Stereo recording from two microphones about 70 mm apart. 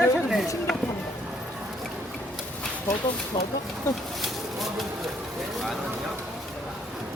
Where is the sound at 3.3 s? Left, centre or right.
Left.